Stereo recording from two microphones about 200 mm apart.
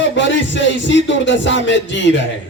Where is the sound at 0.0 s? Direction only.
65° left (ahead or behind).